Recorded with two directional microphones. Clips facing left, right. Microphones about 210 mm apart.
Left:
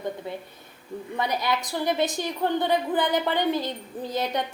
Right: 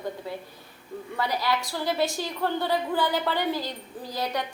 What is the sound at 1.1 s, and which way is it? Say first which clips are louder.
A woman's voice: left 1 dB; 20° left (ahead or behind).